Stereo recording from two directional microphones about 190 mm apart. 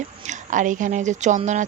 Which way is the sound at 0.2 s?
40° right (ahead or behind).